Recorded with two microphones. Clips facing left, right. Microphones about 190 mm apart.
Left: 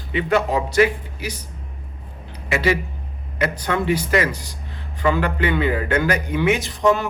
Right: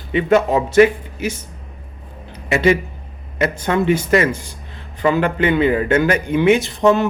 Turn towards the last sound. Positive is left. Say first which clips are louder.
# right 4 dB
turn(degrees=-25)  # may be behind; listen again after turning